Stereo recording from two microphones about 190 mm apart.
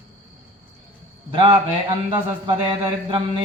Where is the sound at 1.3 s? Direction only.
25° right (ahead or behind).